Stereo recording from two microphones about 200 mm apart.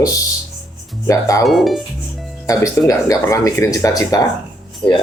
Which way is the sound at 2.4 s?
15° left (ahead or behind).